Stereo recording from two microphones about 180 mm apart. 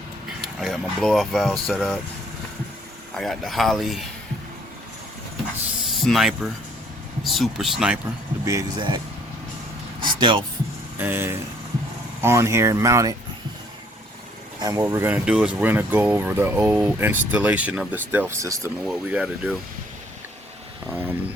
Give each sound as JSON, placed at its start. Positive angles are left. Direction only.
{"t": 0.4, "sound": "speech", "side_deg": 0}
{"t": 3.2, "sound": "speech", "side_deg": 0}
{"t": 5.8, "sound": "speech", "side_deg": 0}
{"t": 8.4, "sound": "speech", "side_deg": -20}
{"t": 10.0, "sound": "a sound", "side_deg": -25}
{"t": 10.9, "sound": "speech", "side_deg": -10}
{"t": 14.6, "sound": "speech", "side_deg": -20}
{"t": 18.9, "sound": "speech", "side_deg": -5}
{"t": 20.9, "sound": "a sound", "side_deg": -10}